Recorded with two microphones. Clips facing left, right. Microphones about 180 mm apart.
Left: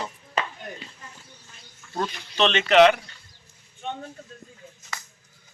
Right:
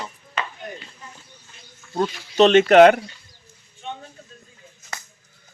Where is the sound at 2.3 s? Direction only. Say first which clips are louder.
Right 6 dB; 45° right (ahead or behind).